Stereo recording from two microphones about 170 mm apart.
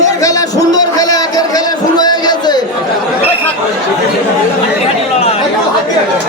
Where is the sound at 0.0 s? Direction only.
20° left (ahead or behind).